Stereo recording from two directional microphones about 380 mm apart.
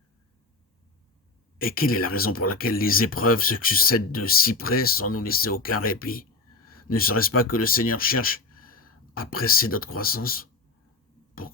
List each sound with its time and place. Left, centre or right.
1.5 s speech: left